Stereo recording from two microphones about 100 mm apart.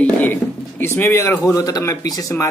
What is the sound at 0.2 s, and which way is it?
Speech, 20° left (ahead or behind).